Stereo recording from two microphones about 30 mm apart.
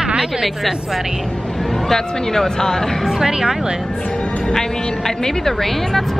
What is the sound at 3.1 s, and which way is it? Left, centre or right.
Speech, centre.